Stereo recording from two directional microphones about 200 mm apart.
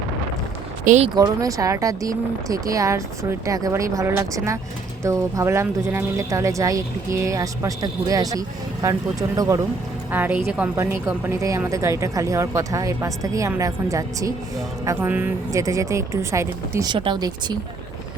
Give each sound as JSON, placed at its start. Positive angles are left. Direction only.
{"t": 0.9, "sound": "speech", "side_deg": -35}
{"t": 1.1, "sound": "speech", "side_deg": -20}